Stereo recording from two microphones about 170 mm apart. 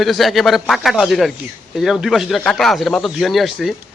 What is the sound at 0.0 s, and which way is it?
Speech, centre (ahead or behind).